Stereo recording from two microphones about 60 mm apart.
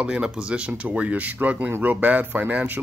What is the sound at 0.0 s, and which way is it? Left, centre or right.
Speech, centre.